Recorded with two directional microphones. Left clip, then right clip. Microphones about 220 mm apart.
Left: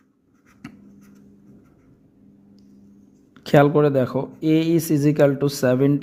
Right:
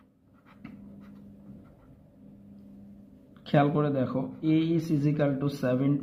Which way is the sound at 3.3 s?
50° left (ahead or behind).